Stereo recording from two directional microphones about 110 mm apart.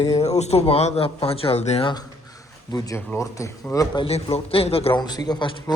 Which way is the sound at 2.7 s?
35° left (ahead or behind).